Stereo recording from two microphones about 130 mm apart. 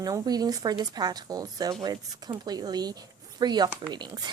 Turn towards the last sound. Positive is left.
turn(degrees=-35)  # may be behind; listen again after turning